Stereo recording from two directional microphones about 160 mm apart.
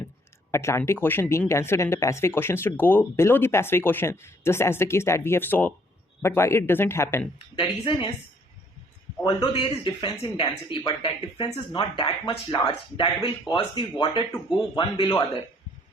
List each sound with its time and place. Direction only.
0.5 s speech: 15° left (ahead or behind)
7.5 s speech: 30° left (ahead or behind)
9.2 s speech: 25° left (ahead or behind)